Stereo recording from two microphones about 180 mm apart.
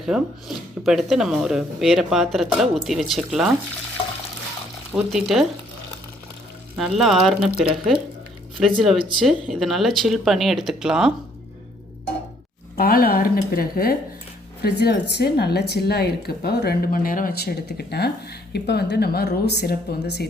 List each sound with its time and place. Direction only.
0.0 s speech: centre (ahead or behind)
5.1 s speech: centre (ahead or behind)
6.7 s speech: 5° right (ahead or behind)
8.6 s speech: centre (ahead or behind)
12.7 s speech: 55° left (ahead or behind)